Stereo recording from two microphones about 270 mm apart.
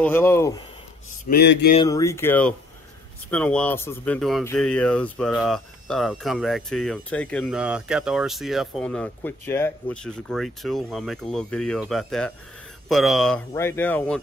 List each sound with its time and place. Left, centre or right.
0.0 s speech: centre
1.3 s mantra: left
1.8 s speech: centre